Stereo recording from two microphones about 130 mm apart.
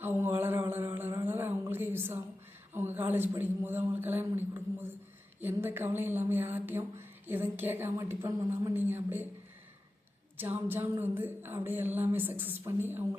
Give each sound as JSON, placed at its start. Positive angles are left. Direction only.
{"t": 0.0, "sound": "a sound", "side_deg": -15}
{"t": 2.7, "sound": "speech", "side_deg": -15}
{"t": 10.3, "sound": "speech", "side_deg": -15}